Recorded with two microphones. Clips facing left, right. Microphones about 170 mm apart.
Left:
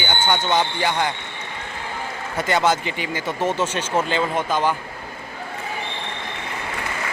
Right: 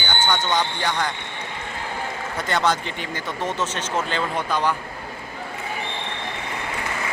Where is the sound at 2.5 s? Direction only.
5° left (ahead or behind).